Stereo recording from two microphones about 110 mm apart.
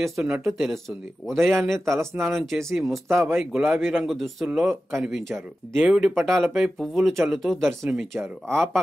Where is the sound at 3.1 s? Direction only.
25° right (ahead or behind).